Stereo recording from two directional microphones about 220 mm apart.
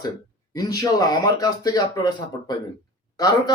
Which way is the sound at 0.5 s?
15° left (ahead or behind).